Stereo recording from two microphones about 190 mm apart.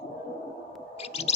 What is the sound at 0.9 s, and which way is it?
Whale vocalization, 35° left (ahead or behind).